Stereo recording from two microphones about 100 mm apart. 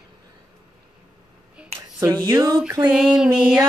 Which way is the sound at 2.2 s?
40° right (ahead or behind).